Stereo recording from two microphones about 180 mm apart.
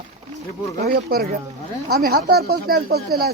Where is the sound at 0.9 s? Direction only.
55° right (ahead or behind).